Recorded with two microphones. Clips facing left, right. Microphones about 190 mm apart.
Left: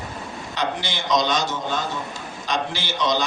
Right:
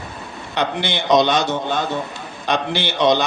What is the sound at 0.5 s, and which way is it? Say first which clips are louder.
A man's voice: right 5 dB; 60° right (ahead or behind).